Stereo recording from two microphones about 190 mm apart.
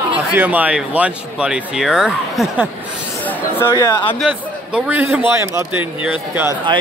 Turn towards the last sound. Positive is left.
turn(degrees=-10)  # may be behind; listen again after turning